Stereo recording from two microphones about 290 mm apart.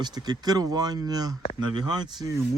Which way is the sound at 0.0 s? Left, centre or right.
Centre.